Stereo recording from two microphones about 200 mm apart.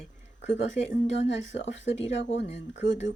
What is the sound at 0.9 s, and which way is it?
Speech, 65° left (ahead or behind).